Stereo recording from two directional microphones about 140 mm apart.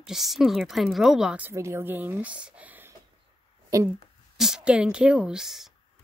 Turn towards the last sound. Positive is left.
turn(degrees=0)  # may be behind; listen again after turning